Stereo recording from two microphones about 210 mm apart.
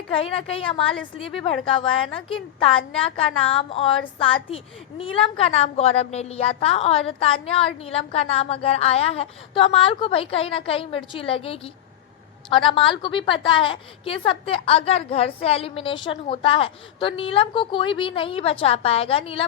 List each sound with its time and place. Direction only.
0.1 s a woman's voice: 25° left (ahead or behind)